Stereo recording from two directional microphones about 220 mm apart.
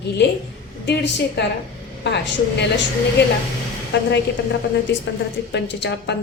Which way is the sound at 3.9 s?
50° left (ahead or behind).